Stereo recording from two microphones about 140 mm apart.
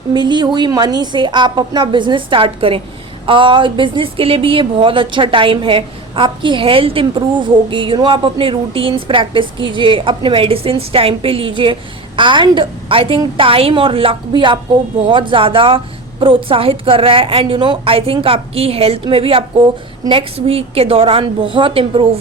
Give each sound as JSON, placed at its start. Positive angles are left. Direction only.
{"t": 0.1, "sound": "speech", "side_deg": -35}